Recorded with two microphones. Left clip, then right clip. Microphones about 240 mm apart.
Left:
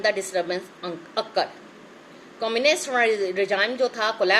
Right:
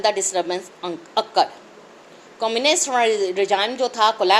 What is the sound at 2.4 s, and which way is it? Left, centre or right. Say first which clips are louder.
A woman's voice: right 2 dB; centre.